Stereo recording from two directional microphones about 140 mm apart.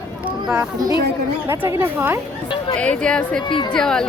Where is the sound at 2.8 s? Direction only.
5° left (ahead or behind).